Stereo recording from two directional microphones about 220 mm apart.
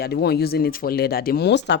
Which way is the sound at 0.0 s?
45° left (ahead or behind).